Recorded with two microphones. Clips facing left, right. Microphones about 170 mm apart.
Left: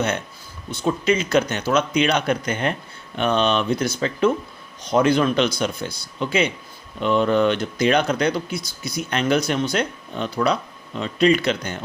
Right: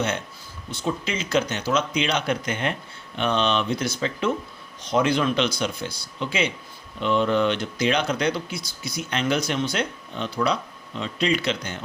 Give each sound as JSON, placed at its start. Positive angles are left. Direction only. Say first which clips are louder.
{"t": 0.7, "sound": "speech", "louder": "left 7 dB", "side_deg": 55}